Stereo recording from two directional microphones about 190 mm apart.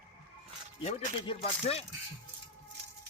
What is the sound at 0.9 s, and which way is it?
Speech, 35° left (ahead or behind).